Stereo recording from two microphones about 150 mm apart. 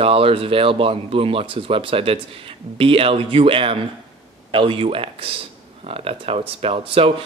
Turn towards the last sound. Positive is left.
turn(degrees=-40)  # may be behind; listen again after turning